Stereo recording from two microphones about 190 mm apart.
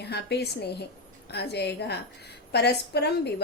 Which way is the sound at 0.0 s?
60° left (ahead or behind).